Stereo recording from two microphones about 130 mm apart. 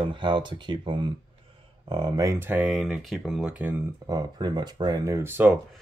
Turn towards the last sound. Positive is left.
turn(degrees=-15)  # may be behind; listen again after turning